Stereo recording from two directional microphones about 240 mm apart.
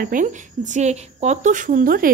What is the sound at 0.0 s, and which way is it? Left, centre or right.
A woman's voice, right.